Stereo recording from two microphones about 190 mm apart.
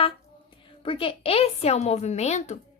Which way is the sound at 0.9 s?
30° left (ahead or behind).